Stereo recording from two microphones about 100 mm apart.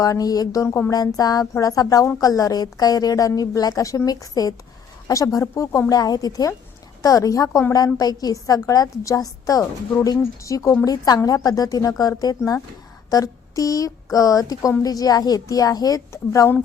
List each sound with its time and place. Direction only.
0.0 s a woman's voice: 35° left (ahead or behind)